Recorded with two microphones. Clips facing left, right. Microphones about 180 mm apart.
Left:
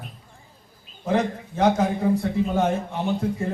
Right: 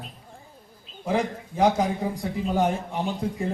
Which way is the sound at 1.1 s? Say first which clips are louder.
Left 2 dB; 10° right (ahead or behind).